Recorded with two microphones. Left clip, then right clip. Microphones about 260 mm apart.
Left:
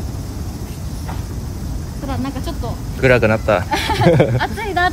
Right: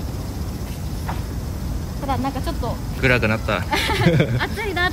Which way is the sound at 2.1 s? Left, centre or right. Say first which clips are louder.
Right 2 dB; right.